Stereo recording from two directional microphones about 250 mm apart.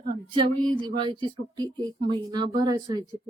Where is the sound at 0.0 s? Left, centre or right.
Centre.